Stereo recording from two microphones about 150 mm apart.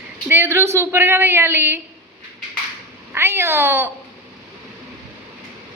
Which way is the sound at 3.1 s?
15° right (ahead or behind).